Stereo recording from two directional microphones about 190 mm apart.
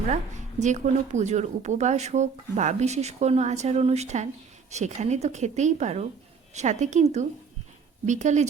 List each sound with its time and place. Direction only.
0.1 s speech: 40° right (ahead or behind)